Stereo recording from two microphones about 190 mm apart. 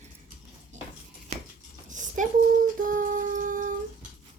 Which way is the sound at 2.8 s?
45° right (ahead or behind).